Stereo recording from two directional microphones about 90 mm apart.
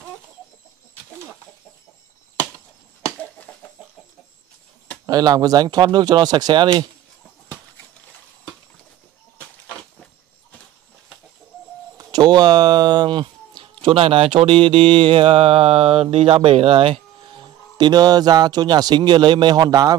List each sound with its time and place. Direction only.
5.0 s speech: 45° right (ahead or behind)
9.4 s goat: 10° left (ahead or behind)
12.0 s speech: 50° right (ahead or behind)